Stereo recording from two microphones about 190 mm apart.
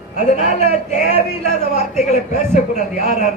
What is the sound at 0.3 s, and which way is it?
Speech, 40° left (ahead or behind).